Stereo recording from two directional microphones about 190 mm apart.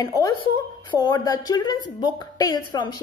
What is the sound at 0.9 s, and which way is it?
A woman's voice, 20° left (ahead or behind).